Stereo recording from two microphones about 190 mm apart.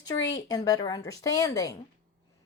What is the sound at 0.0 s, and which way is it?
Speech, 20° left (ahead or behind).